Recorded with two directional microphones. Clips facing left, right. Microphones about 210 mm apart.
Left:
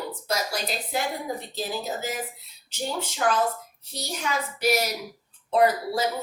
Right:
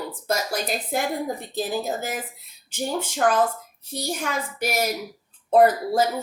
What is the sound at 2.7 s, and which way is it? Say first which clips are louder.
A woman's voice: right 3 dB; 50° right (ahead or behind).